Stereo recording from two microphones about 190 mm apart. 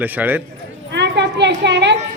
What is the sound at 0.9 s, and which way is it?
A man's voice, 65° right (ahead or behind).